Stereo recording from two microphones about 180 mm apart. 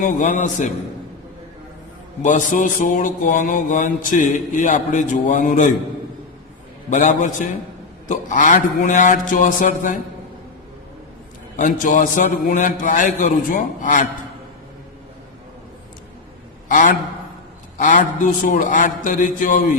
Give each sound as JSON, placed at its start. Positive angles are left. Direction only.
{"t": 0.0, "sound": "mantra", "side_deg": 45}
{"t": 2.2, "sound": "mantra", "side_deg": 45}
{"t": 6.9, "sound": "mantra", "side_deg": 45}
{"t": 11.5, "sound": "mantra", "side_deg": 45}
{"t": 16.6, "sound": "a man's voice", "side_deg": 45}
{"t": 17.7, "sound": "mantra", "side_deg": 45}